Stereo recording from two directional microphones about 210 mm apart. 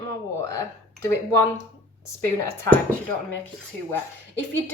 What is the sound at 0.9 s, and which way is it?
Speech, 15° left (ahead or behind).